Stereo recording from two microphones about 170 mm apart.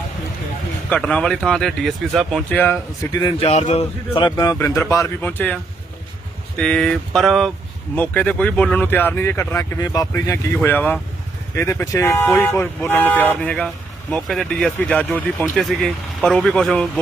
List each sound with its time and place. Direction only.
0.9 s speech: 5° left (ahead or behind)
3.0 s speech: 20° left (ahead or behind)
3.3 s speech: 40° left (ahead or behind)
4.1 s speech: 25° left (ahead or behind); by 5.5 s 10° left (ahead or behind)
6.6 s speech: 5° left (ahead or behind)